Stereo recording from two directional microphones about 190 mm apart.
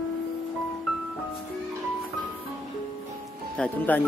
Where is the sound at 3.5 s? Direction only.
5° left (ahead or behind).